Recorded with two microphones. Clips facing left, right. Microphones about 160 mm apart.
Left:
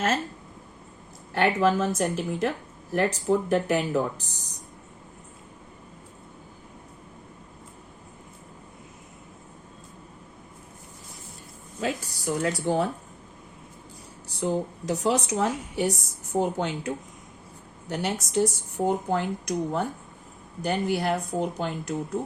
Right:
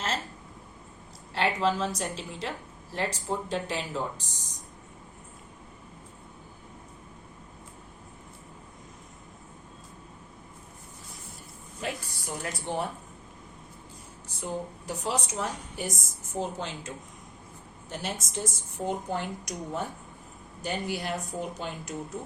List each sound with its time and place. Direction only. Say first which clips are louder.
1.3 s speech: left 5 dB; 55° left (ahead or behind)
3.2 s speech: left 8 dB; 70° left (ahead or behind)
11.8 s speech: left 6 dB; 90° left
14.3 s speech: left 7 dB; 70° left (ahead or behind)